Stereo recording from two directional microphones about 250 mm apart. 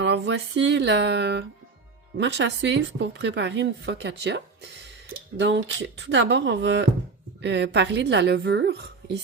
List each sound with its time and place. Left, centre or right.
0.0 s a woman's voice: right